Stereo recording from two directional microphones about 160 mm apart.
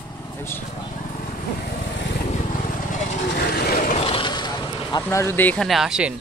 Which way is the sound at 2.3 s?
50° left (ahead or behind).